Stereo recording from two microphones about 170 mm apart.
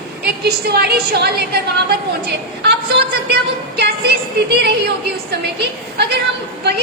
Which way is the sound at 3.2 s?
75° right (ahead or behind).